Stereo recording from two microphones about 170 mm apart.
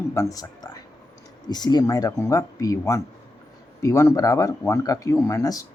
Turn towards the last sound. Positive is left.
turn(degrees=20)  # may be behind; listen again after turning